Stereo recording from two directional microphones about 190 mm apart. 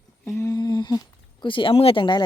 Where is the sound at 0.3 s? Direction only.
15° left (ahead or behind).